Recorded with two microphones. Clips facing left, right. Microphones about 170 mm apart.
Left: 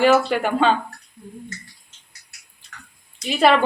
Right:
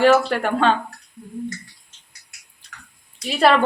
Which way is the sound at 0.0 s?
Centre (ahead or behind).